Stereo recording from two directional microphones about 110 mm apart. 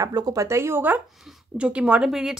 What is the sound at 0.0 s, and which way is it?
A woman's voice, 35° right (ahead or behind).